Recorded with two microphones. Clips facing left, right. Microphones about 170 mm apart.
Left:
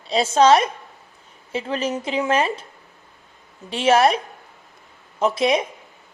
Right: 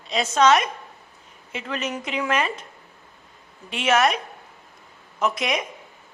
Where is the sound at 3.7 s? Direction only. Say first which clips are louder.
Left 4 dB; 30° left (ahead or behind).